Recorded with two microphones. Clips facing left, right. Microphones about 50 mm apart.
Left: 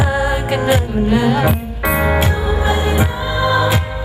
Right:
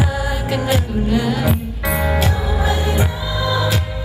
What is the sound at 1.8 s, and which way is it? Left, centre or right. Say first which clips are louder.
Music: left 4 dB; left.